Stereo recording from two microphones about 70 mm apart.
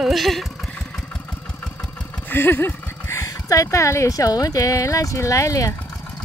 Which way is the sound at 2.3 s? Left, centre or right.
Left.